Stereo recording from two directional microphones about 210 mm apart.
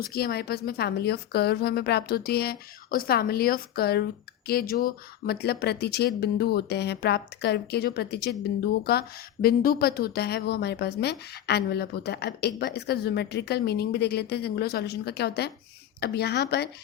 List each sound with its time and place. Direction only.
0.0 s a woman's voice: 45° left (ahead or behind)